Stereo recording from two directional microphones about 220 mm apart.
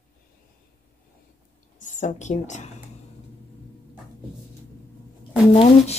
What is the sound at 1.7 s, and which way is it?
Speech, 35° left (ahead or behind).